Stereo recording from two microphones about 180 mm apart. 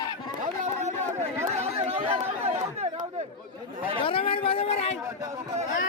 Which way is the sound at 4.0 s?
30° left (ahead or behind).